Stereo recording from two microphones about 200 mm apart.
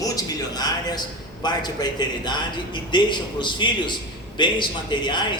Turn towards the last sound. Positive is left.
turn(degrees=20)  # may be behind; listen again after turning